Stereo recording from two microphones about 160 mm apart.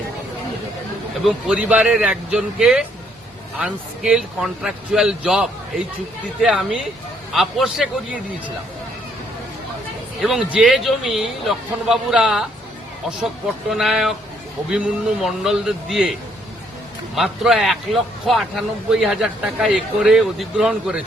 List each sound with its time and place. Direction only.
1.2 s a man's voice: centre (ahead or behind)
10.2 s a man's voice: 5° right (ahead or behind)
13.7 s a man's voice: centre (ahead or behind)
17.2 s a man's voice: 5° right (ahead or behind)